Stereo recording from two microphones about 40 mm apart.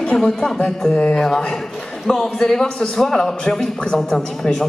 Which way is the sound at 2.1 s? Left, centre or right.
Centre.